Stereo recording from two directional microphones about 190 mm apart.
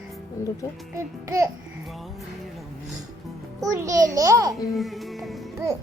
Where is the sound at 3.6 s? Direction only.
15° right (ahead or behind).